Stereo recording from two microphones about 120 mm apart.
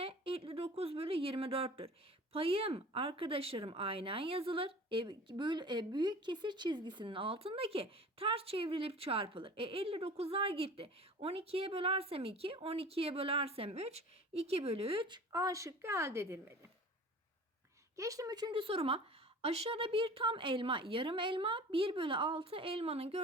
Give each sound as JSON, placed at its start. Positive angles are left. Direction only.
{"t": 0.0, "sound": "a sound", "side_deg": -50}
{"t": 2.3, "sound": "speech", "side_deg": -50}
{"t": 15.3, "sound": "a woman's voice", "side_deg": -25}
{"t": 17.9, "sound": "speech", "side_deg": -25}